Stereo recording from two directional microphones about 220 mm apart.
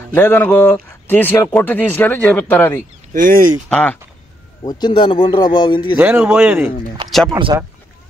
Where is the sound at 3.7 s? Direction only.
5° left (ahead or behind).